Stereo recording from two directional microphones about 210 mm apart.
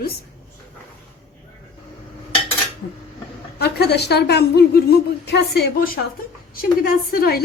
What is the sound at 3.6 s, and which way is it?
A woman's voice, 50° left (ahead or behind).